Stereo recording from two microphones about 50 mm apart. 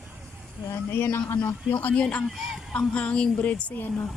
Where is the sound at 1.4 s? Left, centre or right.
Left.